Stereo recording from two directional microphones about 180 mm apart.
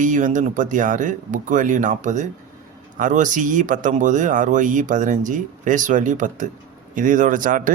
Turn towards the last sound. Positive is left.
turn(degrees=-45)  # may be behind; listen again after turning